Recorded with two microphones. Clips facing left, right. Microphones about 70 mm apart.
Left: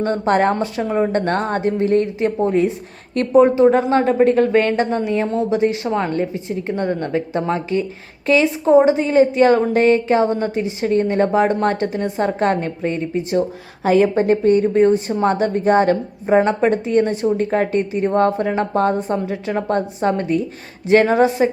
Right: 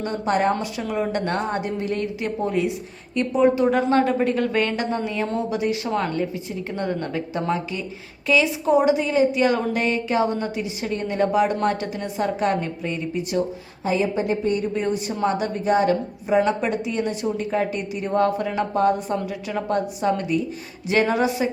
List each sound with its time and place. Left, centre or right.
0.3 s a woman's voice: left
0.5 s a woman's voice: left
1.6 s a woman's voice: left
3.5 s a woman's voice: left
13.8 s a woman's voice: left
14.2 s a woman's voice: left